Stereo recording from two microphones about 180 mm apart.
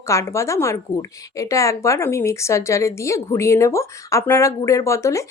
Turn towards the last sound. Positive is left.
turn(degrees=15)  # may be behind; listen again after turning